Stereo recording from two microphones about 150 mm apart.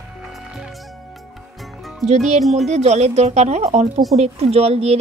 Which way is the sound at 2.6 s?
50° right (ahead or behind).